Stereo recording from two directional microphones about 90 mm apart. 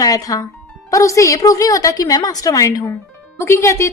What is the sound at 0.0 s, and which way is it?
A woman's voice, 40° left (ahead or behind).